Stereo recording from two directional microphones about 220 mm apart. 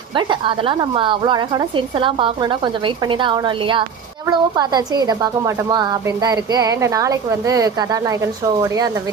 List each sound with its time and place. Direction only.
0.1 s speech: 20° right (ahead or behind)